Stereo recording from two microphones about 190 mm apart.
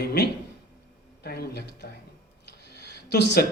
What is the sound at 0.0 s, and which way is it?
Speech, 55° left (ahead or behind).